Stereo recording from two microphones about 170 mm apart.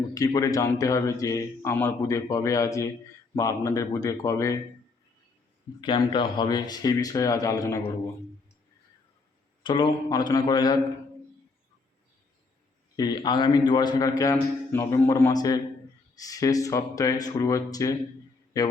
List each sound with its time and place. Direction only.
0.1 s a man's voice: 20° left (ahead or behind)
5.8 s a man's voice: 30° left (ahead or behind)
9.6 s a man's voice: 30° left (ahead or behind)
13.0 s a man's voice: 25° left (ahead or behind)